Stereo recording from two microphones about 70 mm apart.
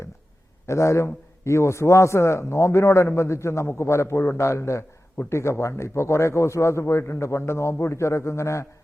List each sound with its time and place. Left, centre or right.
0.7 s a man's voice: left